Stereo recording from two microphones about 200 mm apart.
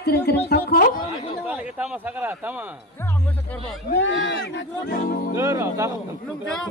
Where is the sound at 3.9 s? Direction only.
65° left (ahead or behind).